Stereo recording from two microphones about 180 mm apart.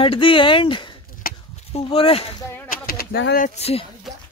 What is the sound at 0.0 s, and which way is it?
Speech, 30° left (ahead or behind).